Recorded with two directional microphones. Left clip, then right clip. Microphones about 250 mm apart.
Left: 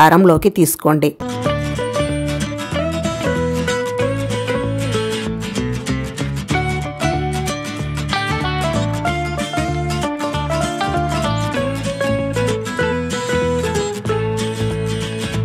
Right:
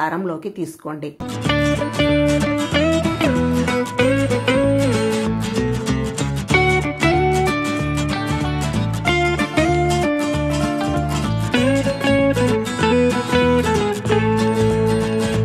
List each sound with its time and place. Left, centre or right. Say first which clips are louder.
0.0 s speech: left 12 dB; left
1.5 s music: right 4 dB; centre
6.5 s music: right 5 dB; centre
9.6 s music: right 6 dB; centre
11.5 s music: right 3 dB; centre